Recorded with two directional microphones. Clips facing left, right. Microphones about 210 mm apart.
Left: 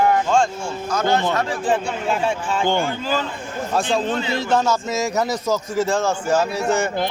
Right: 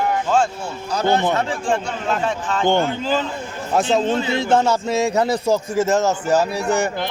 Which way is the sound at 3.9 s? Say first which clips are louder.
Right 3 dB; 25° right (ahead or behind).